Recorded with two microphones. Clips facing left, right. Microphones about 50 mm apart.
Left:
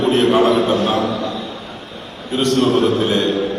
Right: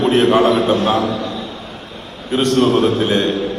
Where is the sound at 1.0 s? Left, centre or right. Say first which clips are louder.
Even; left.